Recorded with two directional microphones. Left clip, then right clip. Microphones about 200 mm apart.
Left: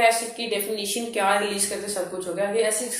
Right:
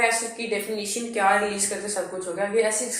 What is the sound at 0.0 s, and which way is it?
A woman's voice, 30° left (ahead or behind).